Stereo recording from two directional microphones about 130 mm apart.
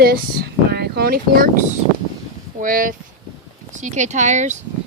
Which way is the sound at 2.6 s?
90° right.